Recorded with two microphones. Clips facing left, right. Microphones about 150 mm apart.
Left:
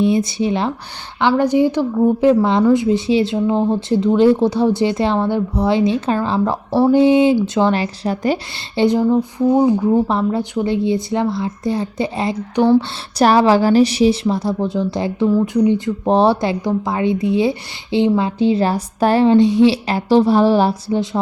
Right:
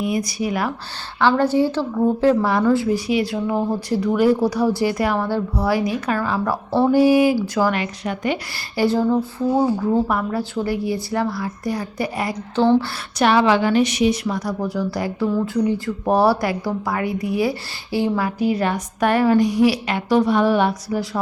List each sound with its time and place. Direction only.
0.0 s a woman's voice: 25° left (ahead or behind)
1.3 s a woman's voice: 15° left (ahead or behind); by 8.4 s 35° left (ahead or behind)
8.5 s a woman's voice: 25° left (ahead or behind)
13.1 s a woman's voice: 35° left (ahead or behind)